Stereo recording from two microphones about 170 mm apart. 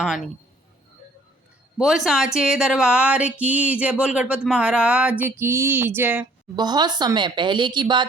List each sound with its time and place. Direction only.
0.0 s speech: centre (ahead or behind)
1.8 s speech: centre (ahead or behind)
6.6 s a woman's voice: 25° right (ahead or behind)